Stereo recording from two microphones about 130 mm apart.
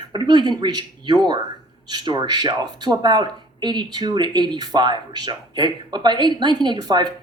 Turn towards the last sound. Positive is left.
turn(degrees=-35)  # may be behind; listen again after turning